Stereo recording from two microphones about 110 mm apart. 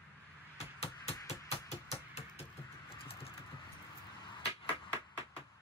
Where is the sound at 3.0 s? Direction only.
60° left (ahead or behind).